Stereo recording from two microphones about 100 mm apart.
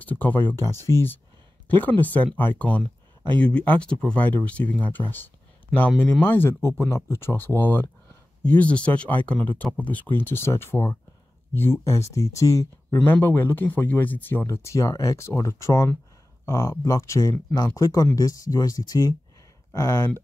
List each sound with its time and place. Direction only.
0.0 s speech: 20° left (ahead or behind)
6.2 s speech: 20° left (ahead or behind)
12.9 s speech: 20° left (ahead or behind)